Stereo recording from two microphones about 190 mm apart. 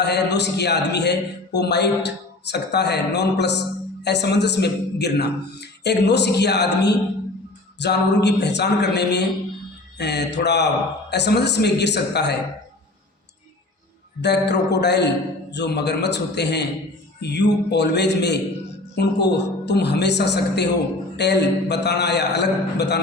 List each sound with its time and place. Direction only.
0.0 s a man's voice: 65° left (ahead or behind)
14.2 s a man's voice: 65° left (ahead or behind)